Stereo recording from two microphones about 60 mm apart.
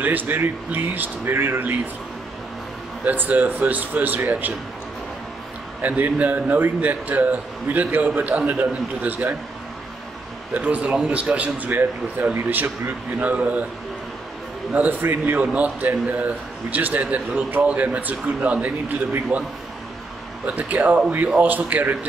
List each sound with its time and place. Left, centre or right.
0.0 s speech: right
3.1 s a man's voice: right
5.8 s a man's voice: right
10.5 s a man's voice: right
14.7 s a man's voice: right